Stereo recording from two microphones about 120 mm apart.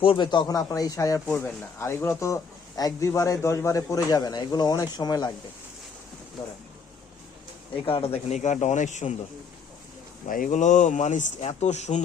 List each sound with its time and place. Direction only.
0.0 s speech: 45° left (ahead or behind)
7.9 s speech: 50° left (ahead or behind); by 9.1 s 80° left
10.2 s speech: 90° left; by 12.0 s 75° left (ahead or behind)